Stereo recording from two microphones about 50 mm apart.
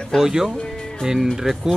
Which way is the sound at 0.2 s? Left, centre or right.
Centre.